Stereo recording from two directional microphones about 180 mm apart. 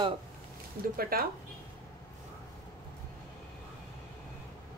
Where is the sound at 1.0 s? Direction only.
55° right (ahead or behind).